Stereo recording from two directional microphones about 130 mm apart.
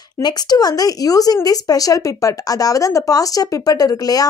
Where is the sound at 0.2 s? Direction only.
30° left (ahead or behind).